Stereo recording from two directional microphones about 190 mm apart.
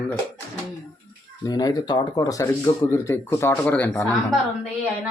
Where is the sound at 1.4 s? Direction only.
20° left (ahead or behind).